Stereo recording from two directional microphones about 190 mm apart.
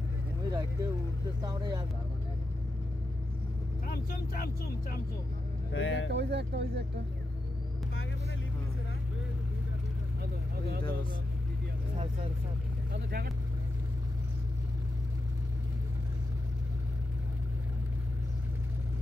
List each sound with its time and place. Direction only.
0.5 s vehicle: 15° right (ahead or behind)
1.4 s speech: 20° right (ahead or behind)
3.8 s speech: 50° left (ahead or behind)
5.7 s speech: 90° left
6.0 s speech: 65° right (ahead or behind)
12.9 s speech: 55° right (ahead or behind)